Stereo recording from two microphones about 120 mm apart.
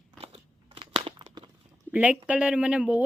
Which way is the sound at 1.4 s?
40° right (ahead or behind).